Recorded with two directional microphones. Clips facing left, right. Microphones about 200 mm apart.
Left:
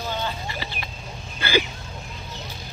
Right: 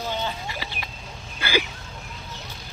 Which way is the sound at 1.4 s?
10° right (ahead or behind).